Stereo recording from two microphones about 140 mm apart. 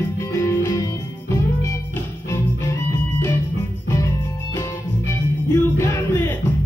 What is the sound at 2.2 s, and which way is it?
Music, 20° left (ahead or behind).